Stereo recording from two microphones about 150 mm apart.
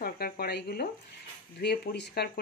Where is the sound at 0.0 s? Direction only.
90° left.